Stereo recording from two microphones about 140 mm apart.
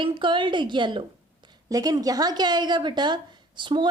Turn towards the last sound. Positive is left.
turn(degrees=-35)  # may be behind; listen again after turning